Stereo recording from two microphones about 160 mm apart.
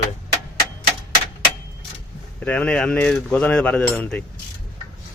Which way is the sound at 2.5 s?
10° left (ahead or behind).